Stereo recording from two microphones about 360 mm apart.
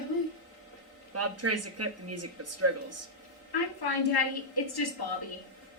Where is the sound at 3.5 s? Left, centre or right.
Left.